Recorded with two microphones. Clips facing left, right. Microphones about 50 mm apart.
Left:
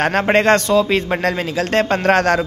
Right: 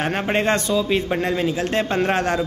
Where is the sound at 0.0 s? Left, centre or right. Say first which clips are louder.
Left 6 dB; left.